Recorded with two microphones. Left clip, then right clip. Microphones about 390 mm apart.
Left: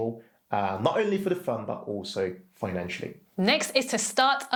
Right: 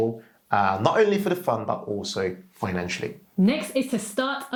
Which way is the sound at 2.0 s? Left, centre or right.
Right.